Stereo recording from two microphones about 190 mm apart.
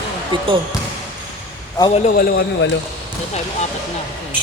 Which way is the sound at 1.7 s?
25° left (ahead or behind).